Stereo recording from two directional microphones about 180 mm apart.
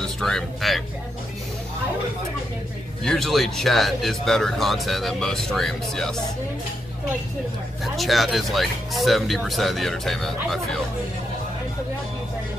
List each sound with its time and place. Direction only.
0.0 s speech: 5° left (ahead or behind)
3.0 s speech: centre (ahead or behind)
7.8 s speech: centre (ahead or behind)